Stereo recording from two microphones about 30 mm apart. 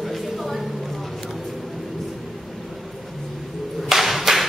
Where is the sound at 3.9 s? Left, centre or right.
Centre.